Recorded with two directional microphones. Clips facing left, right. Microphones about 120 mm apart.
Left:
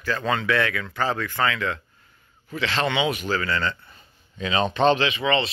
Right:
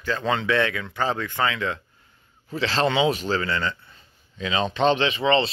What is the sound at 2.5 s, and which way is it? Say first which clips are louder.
Speech: right 2 dB; 35° right (ahead or behind).